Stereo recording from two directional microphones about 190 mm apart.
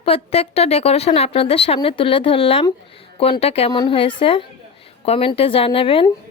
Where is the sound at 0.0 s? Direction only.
30° left (ahead or behind).